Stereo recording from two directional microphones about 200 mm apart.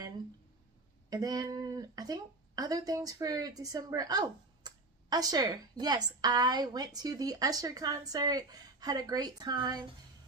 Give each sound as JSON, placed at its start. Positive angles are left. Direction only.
{"t": 1.1, "sound": "speech", "side_deg": -20}